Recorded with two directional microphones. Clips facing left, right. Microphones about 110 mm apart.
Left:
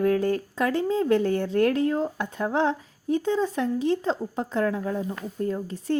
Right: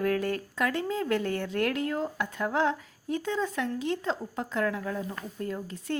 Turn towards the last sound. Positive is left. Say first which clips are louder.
# left 7 dB
turn(degrees=30)  # may be behind; listen again after turning